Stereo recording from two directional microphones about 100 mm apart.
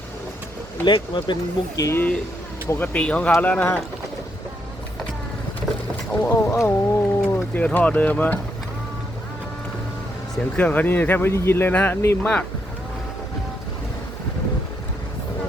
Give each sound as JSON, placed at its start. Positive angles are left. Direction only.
{"t": 0.9, "sound": "speech", "side_deg": 50}
{"t": 1.8, "sound": "wild animals", "side_deg": 25}
{"t": 2.6, "sound": "speech", "side_deg": 20}
{"t": 6.3, "sound": "wild animals", "side_deg": 25}
{"t": 7.3, "sound": "speech", "side_deg": 20}
{"t": 10.3, "sound": "speech", "side_deg": 15}